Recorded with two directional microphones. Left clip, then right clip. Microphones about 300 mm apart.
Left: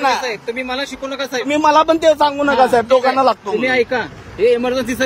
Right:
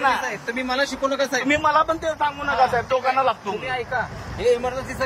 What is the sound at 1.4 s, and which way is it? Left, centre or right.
A man's voice, left.